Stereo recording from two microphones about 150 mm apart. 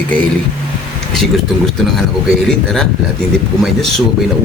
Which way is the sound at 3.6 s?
Centre (ahead or behind).